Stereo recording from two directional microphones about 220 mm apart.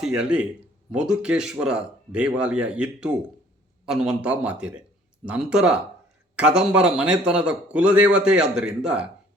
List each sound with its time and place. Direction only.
0.0 s a man's voice: 5° right (ahead or behind)